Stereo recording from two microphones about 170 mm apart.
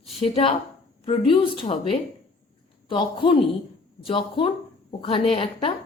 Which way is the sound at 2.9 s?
30° left (ahead or behind).